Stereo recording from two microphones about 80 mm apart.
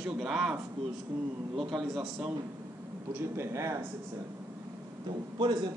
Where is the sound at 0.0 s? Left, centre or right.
Centre.